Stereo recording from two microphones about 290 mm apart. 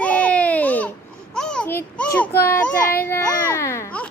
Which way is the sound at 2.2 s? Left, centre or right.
Centre.